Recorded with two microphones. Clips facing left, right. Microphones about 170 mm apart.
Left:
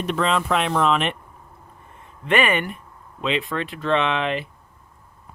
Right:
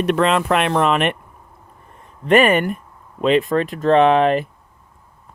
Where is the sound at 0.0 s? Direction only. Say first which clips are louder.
Right 5 dB; 65° right (ahead or behind).